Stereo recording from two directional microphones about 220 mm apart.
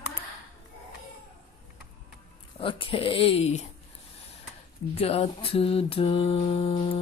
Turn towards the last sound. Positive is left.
turn(degrees=25)  # may be behind; listen again after turning